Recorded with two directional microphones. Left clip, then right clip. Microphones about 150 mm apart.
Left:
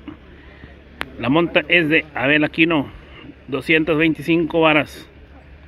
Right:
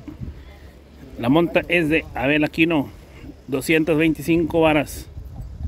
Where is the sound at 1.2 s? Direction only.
30° right (ahead or behind).